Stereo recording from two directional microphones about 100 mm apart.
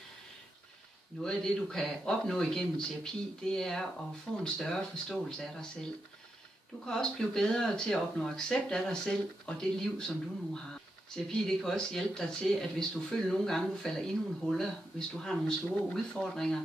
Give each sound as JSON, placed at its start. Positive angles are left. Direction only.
{"t": 1.2, "sound": "speech", "side_deg": 5}
{"t": 6.9, "sound": "speech", "side_deg": 5}